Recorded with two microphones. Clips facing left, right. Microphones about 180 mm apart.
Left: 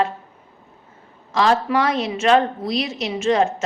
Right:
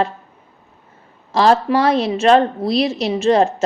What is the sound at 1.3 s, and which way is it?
A woman's voice, 35° right (ahead or behind).